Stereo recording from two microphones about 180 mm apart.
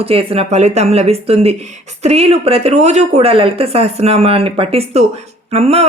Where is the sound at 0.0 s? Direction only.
30° right (ahead or behind).